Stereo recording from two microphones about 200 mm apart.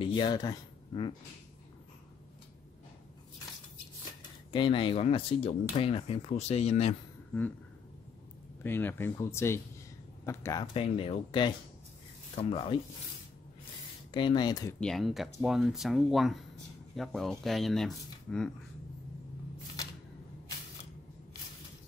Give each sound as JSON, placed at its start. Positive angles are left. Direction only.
{"t": 0.0, "sound": "speech", "side_deg": 25}
{"t": 4.5, "sound": "speech", "side_deg": 25}
{"t": 8.6, "sound": "speech", "side_deg": 10}
{"t": 14.1, "sound": "speech", "side_deg": 20}
{"t": 14.8, "sound": "speech", "side_deg": 0}